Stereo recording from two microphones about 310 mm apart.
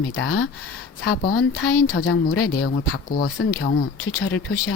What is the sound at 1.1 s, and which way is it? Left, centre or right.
Speech, left.